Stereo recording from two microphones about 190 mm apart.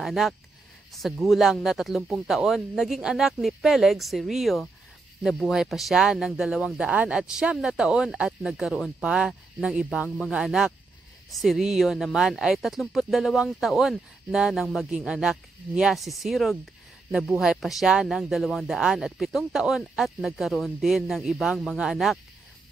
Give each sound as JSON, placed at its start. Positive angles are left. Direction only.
{"t": 0.0, "sound": "speech", "side_deg": 0}